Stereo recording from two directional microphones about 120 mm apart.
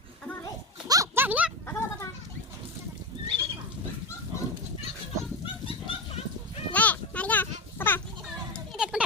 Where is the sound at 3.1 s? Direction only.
35° right (ahead or behind).